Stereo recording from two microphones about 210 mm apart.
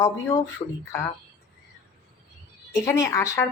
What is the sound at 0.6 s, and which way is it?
Speech, 25° left (ahead or behind).